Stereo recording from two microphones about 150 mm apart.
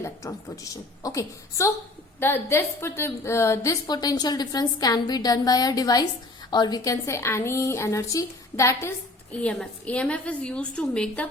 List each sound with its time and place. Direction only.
0.0 s a woman's voice: 20° left (ahead or behind)
9.4 s a woman's voice: 10° left (ahead or behind)